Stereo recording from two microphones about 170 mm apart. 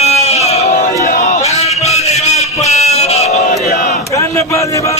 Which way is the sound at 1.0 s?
50° left (ahead or behind).